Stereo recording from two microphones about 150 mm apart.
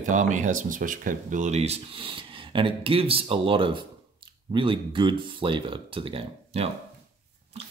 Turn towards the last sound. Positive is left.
turn(degrees=-40)  # may be behind; listen again after turning